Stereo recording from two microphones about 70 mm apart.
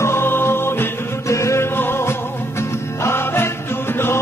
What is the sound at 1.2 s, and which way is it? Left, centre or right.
Music, left.